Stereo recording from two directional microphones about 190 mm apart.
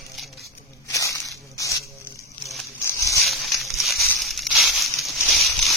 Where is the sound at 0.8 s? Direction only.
15° left (ahead or behind).